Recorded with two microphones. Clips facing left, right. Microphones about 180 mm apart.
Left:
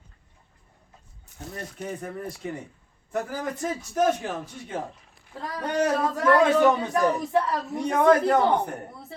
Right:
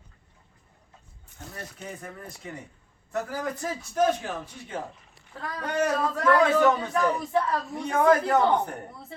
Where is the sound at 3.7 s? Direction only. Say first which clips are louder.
Left 1 dB; 5° left (ahead or behind).